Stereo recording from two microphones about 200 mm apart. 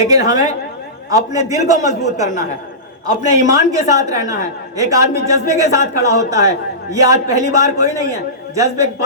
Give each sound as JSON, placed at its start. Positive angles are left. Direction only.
{"t": 0.0, "sound": "speech", "side_deg": -15}
{"t": 3.4, "sound": "speech", "side_deg": -15}